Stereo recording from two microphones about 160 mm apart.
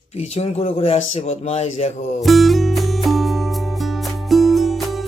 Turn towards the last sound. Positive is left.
turn(degrees=0)  # may be behind; listen again after turning